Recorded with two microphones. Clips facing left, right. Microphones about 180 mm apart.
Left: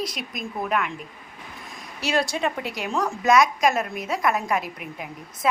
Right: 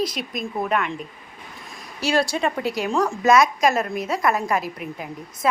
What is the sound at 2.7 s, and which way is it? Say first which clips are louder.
Speech: right 5 dB; 35° right (ahead or behind).